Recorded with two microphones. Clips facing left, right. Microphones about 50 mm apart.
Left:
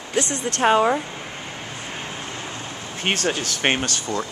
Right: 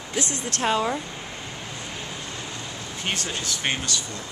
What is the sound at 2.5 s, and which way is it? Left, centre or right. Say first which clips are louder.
Speech: left 2 dB; left.